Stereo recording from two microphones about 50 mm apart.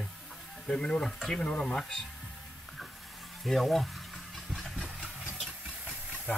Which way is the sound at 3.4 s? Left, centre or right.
Centre.